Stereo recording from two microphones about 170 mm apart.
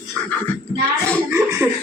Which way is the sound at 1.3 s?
15° right (ahead or behind).